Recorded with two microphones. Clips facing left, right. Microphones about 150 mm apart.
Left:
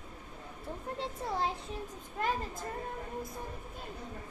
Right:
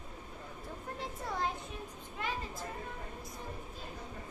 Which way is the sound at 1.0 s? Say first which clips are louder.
Left 2 dB; 30° left (ahead or behind).